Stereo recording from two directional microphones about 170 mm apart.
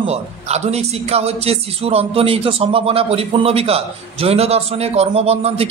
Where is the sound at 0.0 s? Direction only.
40° right (ahead or behind).